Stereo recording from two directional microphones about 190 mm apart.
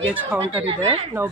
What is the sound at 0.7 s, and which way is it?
Speech, 35° right (ahead or behind).